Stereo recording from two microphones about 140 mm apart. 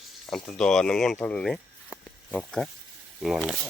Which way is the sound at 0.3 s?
Centre (ahead or behind).